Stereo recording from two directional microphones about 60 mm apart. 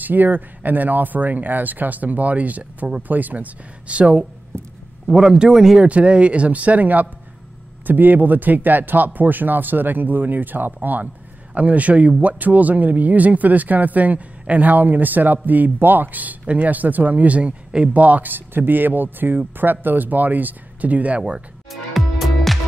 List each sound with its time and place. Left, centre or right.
0.0 s speech: right
5.0 s speech: centre
5.9 s a man's voice: right
21.9 s music: centre